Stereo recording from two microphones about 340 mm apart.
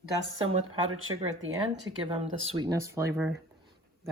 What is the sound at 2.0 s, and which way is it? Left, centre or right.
Speech, centre.